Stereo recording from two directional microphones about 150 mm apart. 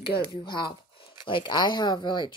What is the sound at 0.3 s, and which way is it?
A woman's voice, 30° left (ahead or behind).